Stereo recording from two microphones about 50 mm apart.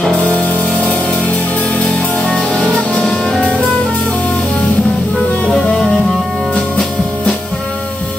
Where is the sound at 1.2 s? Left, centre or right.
Left.